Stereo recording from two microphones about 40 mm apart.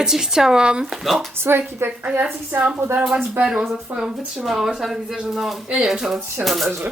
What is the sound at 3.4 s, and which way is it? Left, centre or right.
Speech, centre.